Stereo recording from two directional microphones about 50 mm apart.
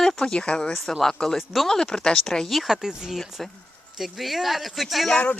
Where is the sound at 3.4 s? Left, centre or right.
Centre.